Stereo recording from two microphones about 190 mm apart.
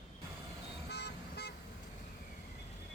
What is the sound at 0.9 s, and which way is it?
Vehicle, 60° left (ahead or behind).